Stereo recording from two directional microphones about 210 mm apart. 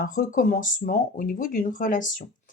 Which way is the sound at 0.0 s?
40° left (ahead or behind).